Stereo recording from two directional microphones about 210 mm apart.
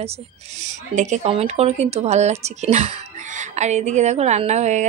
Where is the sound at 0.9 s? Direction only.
35° right (ahead or behind).